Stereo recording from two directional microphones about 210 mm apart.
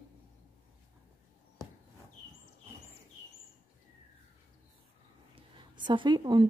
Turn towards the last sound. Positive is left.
turn(degrees=-20)  # may be behind; listen again after turning